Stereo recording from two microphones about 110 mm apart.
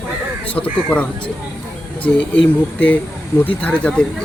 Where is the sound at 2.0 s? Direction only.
10° left (ahead or behind).